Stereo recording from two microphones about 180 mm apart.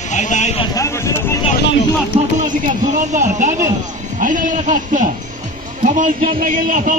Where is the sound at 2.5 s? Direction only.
45° right (ahead or behind).